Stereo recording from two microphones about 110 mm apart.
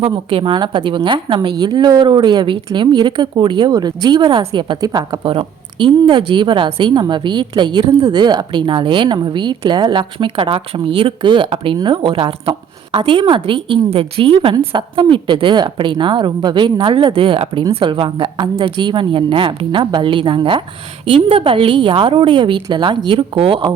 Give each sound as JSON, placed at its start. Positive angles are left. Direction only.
{"t": 0.0, "sound": "a woman's voice", "side_deg": -55}